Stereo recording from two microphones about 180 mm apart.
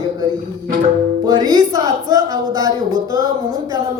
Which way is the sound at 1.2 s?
20° right (ahead or behind).